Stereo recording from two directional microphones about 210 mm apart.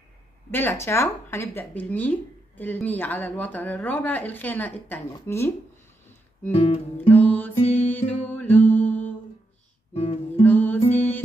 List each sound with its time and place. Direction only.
0.5 s speech: 10° left (ahead or behind)
6.5 s music: 30° left (ahead or behind)
7.1 s speech: 10° left (ahead or behind)
7.7 s music: 10° left (ahead or behind)
9.9 s music: 25° left (ahead or behind)
10.4 s music: 10° left (ahead or behind)
10.9 s mantra: 10° left (ahead or behind)